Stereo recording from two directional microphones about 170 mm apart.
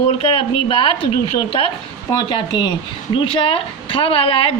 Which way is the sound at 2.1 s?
25° left (ahead or behind).